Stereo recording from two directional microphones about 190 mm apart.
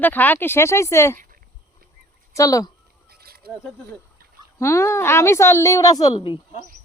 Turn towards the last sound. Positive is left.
turn(degrees=25)  # may be behind; listen again after turning